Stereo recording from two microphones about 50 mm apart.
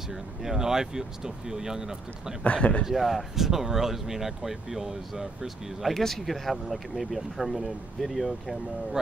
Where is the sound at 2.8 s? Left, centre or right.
Centre.